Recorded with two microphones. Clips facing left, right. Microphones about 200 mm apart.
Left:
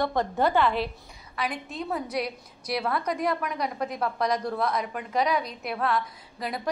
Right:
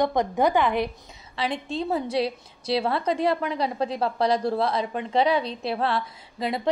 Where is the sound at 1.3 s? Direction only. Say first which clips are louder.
Right 4 dB; 25° right (ahead or behind).